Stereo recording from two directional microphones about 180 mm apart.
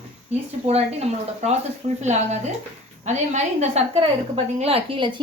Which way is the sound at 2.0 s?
40° right (ahead or behind).